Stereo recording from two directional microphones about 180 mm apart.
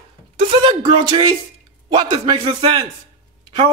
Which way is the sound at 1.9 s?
25° right (ahead or behind).